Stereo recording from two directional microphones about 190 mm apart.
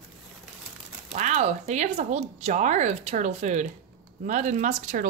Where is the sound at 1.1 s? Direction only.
35° right (ahead or behind).